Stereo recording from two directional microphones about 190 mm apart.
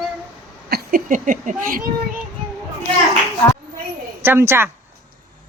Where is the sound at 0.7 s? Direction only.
50° right (ahead or behind).